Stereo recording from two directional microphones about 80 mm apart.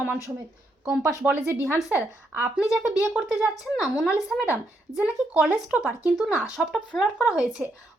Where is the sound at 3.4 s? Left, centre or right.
Centre.